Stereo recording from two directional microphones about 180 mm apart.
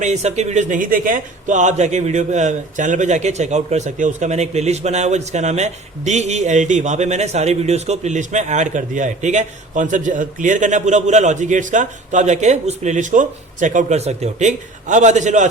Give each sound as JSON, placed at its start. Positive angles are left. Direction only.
{"t": 0.0, "sound": "a man's voice", "side_deg": -40}